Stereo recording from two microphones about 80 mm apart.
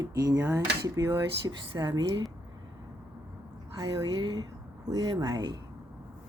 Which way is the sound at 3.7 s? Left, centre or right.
Right.